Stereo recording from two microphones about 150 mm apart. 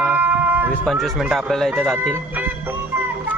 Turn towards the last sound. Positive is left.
turn(degrees=-10)  # may be behind; listen again after turning